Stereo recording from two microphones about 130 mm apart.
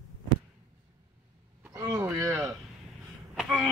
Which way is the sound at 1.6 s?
20° right (ahead or behind).